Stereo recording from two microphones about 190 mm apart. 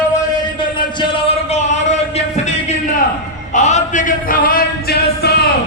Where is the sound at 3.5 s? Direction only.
40° left (ahead or behind); by 5.3 s 55° left (ahead or behind).